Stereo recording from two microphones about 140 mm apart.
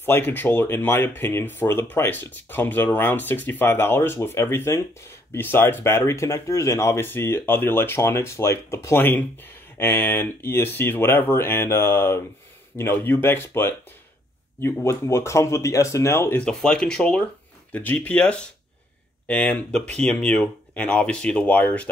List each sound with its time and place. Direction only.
0.0 s speech: 15° left (ahead or behind)